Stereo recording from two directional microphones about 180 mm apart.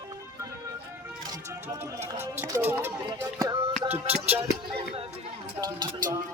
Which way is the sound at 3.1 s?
25° right (ahead or behind).